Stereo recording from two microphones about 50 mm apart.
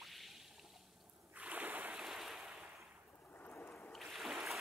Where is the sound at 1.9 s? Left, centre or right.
Centre.